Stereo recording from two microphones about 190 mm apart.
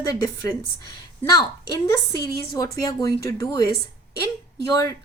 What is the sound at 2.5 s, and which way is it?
A woman's voice, 20° left (ahead or behind).